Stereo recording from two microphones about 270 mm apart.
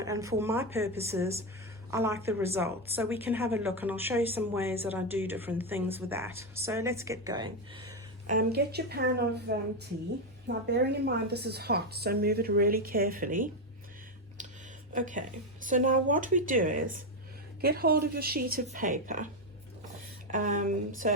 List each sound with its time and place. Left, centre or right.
0.0 s speech: centre
8.3 s a woman's voice: right
10.7 s a woman's voice: right
14.9 s a woman's voice: right
20.3 s a woman's voice: right